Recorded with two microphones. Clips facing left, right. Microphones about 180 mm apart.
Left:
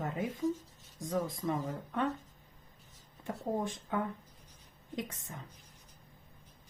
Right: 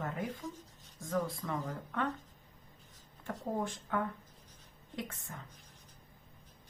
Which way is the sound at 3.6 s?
20° left (ahead or behind).